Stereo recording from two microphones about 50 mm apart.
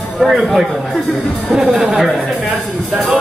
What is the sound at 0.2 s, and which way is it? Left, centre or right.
Speech, centre.